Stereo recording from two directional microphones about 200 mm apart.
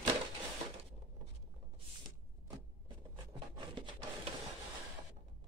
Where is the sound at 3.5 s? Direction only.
25° right (ahead or behind).